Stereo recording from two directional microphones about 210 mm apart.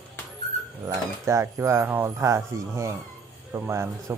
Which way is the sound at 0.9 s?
15° right (ahead or behind).